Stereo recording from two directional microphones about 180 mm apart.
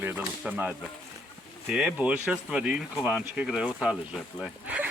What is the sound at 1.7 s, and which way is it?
Speech, 5° right (ahead or behind).